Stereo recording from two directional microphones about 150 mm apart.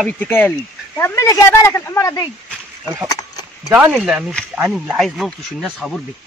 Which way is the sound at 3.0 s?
25° left (ahead or behind).